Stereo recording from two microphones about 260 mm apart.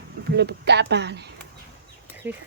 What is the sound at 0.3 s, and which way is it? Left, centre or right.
A woman's voice, right.